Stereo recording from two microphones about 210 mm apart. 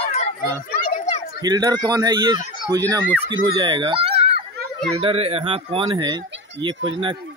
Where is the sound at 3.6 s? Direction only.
20° right (ahead or behind).